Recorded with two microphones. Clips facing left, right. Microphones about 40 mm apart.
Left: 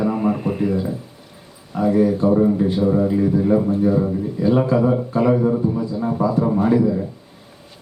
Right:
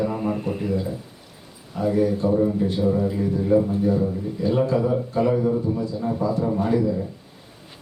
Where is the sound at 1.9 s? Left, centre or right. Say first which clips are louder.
Left 4 dB; left.